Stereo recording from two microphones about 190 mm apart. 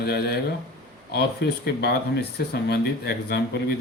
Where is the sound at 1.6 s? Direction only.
60° left (ahead or behind).